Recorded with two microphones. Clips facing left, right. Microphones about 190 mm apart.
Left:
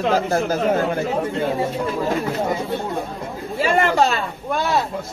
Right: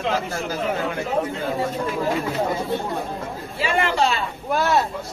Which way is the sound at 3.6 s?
45° left (ahead or behind).